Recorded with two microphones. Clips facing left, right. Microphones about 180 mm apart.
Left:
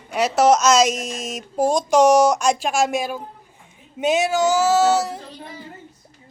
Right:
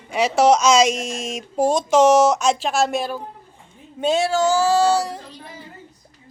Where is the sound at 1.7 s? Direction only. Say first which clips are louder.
Even; centre (ahead or behind).